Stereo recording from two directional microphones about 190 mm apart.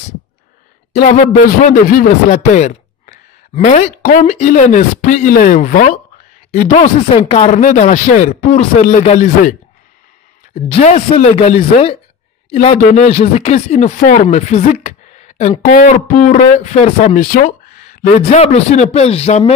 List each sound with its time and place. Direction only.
1.1 s speech: 40° left (ahead or behind)
7.2 s speech: 30° left (ahead or behind)
10.8 s speech: 40° left (ahead or behind)
18.0 s speech: 35° left (ahead or behind)